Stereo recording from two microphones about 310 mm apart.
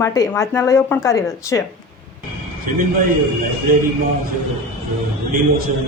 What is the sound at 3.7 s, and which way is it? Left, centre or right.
Speech, right.